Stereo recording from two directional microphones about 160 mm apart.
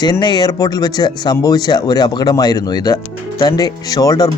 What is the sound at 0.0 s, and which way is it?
Speech, 25° left (ahead or behind).